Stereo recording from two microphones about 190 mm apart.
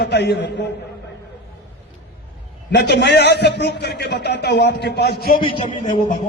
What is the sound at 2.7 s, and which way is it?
A man's voice, 65° left (ahead or behind).